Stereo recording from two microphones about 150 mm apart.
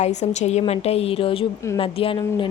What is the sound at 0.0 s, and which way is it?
A woman's voice, 50° left (ahead or behind).